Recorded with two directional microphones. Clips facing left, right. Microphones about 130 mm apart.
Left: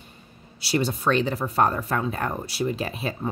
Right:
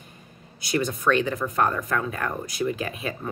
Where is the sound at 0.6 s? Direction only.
30° left (ahead or behind).